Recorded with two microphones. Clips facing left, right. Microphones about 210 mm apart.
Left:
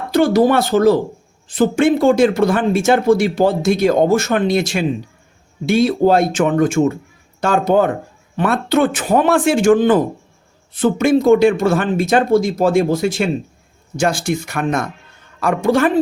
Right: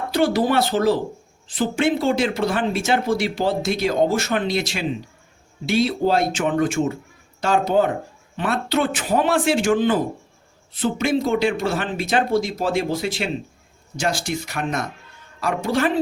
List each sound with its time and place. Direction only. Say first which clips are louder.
0.1 s speech: left 6 dB; 45° left (ahead or behind)